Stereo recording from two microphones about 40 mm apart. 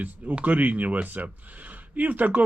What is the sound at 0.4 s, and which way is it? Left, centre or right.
A man's voice, right.